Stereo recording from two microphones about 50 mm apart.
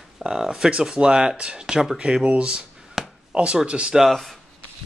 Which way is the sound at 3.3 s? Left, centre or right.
Right.